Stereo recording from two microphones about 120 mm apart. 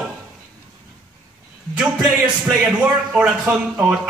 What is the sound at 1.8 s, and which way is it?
A man's voice, 5° right (ahead or behind).